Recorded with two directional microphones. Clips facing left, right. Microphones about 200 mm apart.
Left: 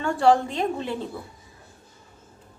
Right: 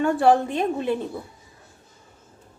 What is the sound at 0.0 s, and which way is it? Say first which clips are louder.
Speech: right 1 dB; 20° right (ahead or behind).